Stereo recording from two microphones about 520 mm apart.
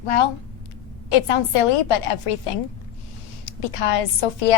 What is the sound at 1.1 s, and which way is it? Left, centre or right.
A woman's voice, left.